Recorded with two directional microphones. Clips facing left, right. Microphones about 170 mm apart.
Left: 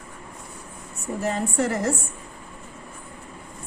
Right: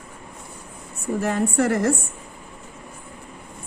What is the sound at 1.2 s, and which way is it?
Speech, 60° right (ahead or behind).